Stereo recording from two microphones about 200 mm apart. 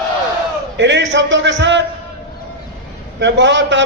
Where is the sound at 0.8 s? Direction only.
65° right (ahead or behind).